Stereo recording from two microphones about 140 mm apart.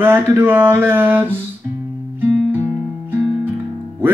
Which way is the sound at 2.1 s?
15° right (ahead or behind).